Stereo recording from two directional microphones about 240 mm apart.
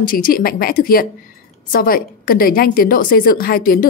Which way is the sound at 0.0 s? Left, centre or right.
Left.